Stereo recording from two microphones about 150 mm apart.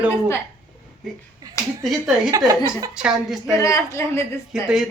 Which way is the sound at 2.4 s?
25° right (ahead or behind).